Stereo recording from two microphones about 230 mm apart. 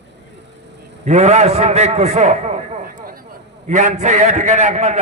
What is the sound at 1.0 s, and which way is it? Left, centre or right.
A man's voice, right.